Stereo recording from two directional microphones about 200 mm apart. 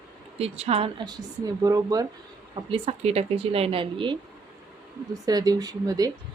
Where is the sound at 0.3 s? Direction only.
30° right (ahead or behind).